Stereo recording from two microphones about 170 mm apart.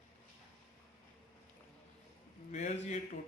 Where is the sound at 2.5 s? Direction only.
40° left (ahead or behind).